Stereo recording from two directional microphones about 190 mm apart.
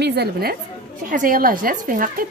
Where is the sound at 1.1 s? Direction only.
45° right (ahead or behind).